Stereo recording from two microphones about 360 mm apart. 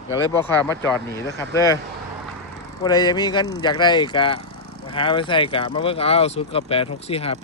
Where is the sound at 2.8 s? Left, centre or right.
Centre.